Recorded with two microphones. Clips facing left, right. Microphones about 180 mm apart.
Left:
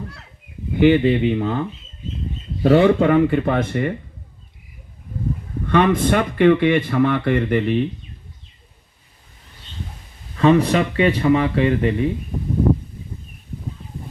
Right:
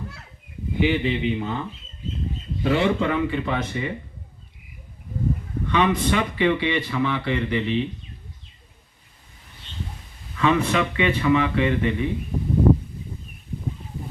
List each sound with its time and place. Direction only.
0.8 s speech: 55° left (ahead or behind)
2.6 s speech: 45° left (ahead or behind)
5.6 s speech: 50° left (ahead or behind)
10.3 s speech: 35° left (ahead or behind)